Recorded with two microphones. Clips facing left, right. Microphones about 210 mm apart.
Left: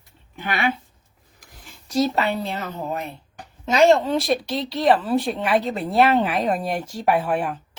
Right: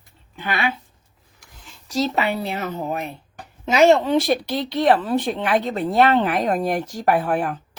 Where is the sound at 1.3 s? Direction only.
55° left (ahead or behind).